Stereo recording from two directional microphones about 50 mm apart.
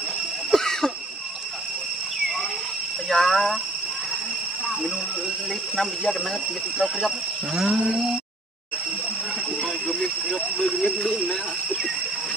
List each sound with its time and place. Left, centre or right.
0.5 s cough: centre
3.1 s speech: centre
5.5 s speech: centre
9.7 s a sound: centre